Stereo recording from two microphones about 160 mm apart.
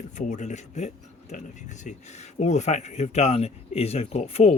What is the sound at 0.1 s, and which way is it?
A man's voice, 50° left (ahead or behind).